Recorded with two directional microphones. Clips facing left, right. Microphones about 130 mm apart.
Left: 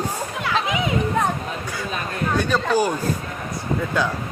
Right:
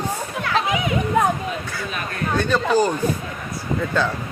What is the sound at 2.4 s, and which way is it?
Speech, 10° left (ahead or behind).